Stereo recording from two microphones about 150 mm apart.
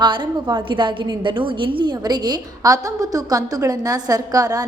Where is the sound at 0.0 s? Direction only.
30° right (ahead or behind).